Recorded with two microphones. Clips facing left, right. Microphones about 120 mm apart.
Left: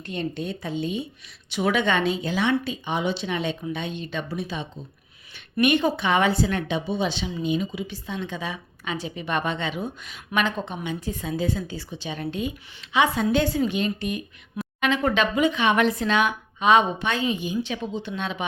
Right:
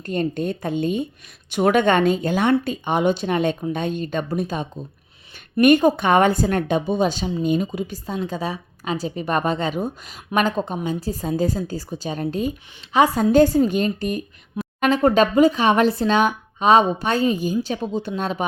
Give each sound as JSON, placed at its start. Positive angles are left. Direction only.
{"t": 0.0, "sound": "a woman's voice", "side_deg": -45}